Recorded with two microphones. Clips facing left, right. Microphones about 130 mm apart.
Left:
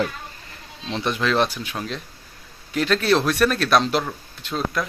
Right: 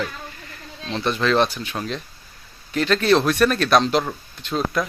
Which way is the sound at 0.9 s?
10° left (ahead or behind).